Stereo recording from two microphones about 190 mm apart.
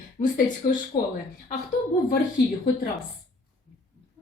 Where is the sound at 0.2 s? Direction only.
45° left (ahead or behind).